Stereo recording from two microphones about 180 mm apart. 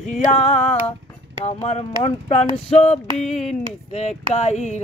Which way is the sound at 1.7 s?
35° left (ahead or behind).